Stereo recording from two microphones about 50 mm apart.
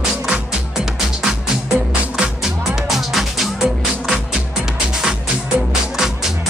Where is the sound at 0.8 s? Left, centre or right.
Centre.